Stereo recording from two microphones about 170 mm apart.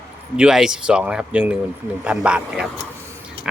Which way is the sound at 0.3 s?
5° right (ahead or behind).